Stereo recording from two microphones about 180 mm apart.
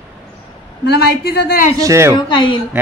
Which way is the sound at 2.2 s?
25° left (ahead or behind).